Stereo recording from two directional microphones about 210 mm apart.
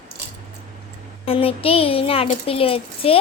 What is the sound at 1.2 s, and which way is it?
Speech, 25° left (ahead or behind).